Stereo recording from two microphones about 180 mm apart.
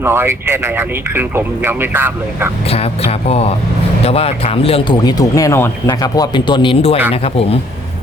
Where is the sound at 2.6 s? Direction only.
35° left (ahead or behind).